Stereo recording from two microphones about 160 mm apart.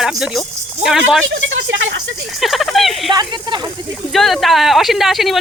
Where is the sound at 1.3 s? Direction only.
90° right.